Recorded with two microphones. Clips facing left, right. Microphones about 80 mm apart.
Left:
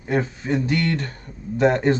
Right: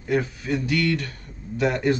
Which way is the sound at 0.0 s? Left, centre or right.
Left.